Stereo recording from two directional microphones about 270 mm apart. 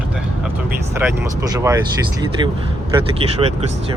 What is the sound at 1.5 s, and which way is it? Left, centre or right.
Speech, centre.